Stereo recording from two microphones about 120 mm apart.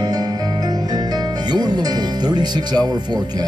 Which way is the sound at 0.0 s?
35° right (ahead or behind).